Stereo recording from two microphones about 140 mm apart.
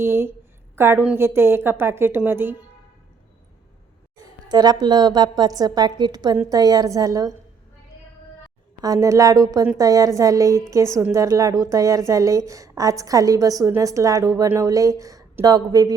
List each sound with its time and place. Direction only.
0.0 s a woman's voice: 15° right (ahead or behind)
4.4 s a woman's voice: 30° right (ahead or behind)
8.8 s a woman's voice: 25° right (ahead or behind)